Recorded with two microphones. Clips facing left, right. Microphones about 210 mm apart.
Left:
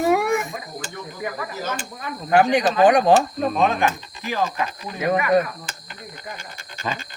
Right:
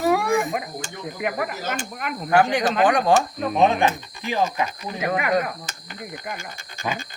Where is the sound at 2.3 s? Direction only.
20° left (ahead or behind).